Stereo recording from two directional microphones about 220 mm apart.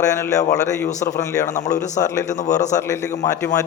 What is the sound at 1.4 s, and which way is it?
A man's voice, 35° left (ahead or behind).